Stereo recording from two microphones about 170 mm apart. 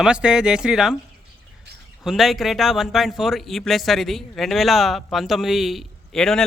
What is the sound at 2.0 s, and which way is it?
A man's voice, centre (ahead or behind).